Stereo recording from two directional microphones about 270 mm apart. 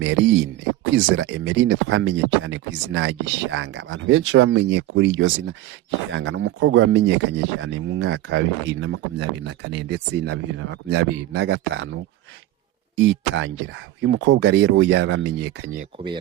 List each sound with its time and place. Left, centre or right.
0.0 s speech: right
13.0 s speech: right